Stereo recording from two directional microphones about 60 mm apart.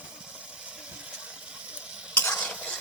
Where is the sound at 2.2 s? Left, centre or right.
Left.